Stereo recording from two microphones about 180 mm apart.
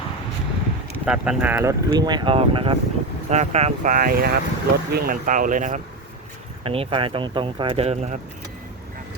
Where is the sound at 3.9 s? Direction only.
55° right (ahead or behind).